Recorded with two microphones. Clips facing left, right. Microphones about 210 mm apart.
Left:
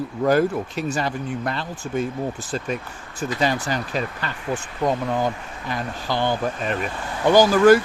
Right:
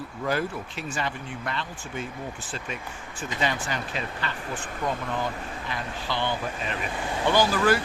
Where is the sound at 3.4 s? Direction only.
35° left (ahead or behind).